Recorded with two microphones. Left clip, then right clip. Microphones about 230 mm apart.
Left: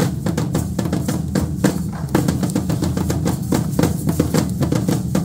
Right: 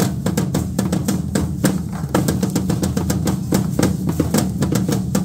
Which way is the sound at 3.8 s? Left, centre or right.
Right.